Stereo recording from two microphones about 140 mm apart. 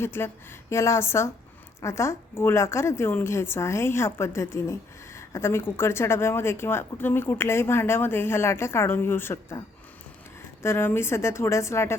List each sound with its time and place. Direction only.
0.0 s a woman's voice: 15° left (ahead or behind)